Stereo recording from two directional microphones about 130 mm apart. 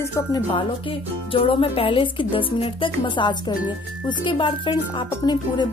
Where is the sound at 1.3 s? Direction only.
45° left (ahead or behind).